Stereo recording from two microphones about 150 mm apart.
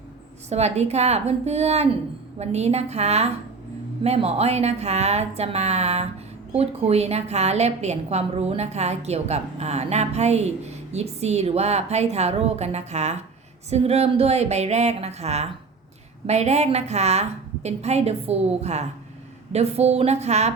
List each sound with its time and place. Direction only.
0.5 s a woman's voice: 45° right (ahead or behind)